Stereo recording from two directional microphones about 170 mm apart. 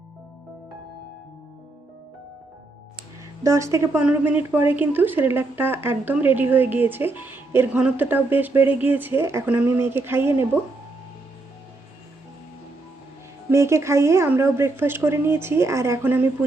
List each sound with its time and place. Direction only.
3.4 s speech: 20° right (ahead or behind)
13.5 s speech: 15° right (ahead or behind)